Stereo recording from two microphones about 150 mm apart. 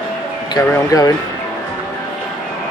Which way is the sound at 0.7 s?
20° left (ahead or behind).